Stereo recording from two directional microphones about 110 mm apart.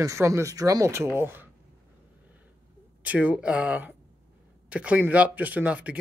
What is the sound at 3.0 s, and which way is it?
Speech, 15° right (ahead or behind).